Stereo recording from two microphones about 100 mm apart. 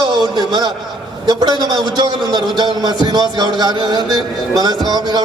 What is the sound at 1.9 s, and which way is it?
A man's voice, 45° right (ahead or behind).